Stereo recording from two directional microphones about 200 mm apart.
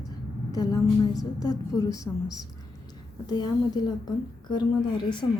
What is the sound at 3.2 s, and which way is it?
A woman's voice, 20° left (ahead or behind).